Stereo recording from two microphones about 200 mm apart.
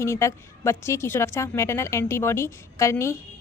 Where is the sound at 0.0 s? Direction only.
15° left (ahead or behind).